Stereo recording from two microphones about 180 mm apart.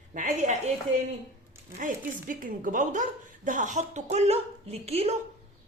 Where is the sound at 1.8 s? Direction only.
50° right (ahead or behind).